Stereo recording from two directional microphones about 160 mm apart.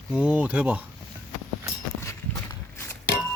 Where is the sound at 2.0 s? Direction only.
20° left (ahead or behind).